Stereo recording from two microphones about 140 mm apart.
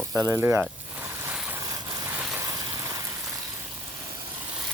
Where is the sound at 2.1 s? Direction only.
10° right (ahead or behind).